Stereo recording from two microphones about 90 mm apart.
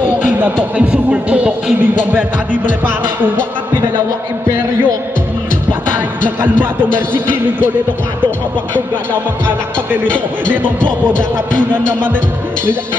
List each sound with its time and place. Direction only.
0.7 s speech: 15° right (ahead or behind)
6.4 s music: 20° right (ahead or behind)
10.0 s speech: 15° left (ahead or behind)